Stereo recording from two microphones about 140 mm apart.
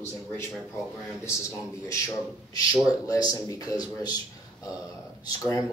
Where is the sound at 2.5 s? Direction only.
25° left (ahead or behind).